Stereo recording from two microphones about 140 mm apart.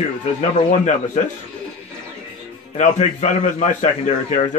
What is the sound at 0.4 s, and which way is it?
Speech, 60° left (ahead or behind).